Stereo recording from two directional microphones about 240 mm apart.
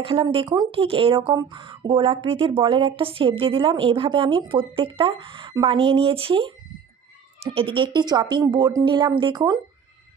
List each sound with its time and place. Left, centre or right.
0.0 s speech: right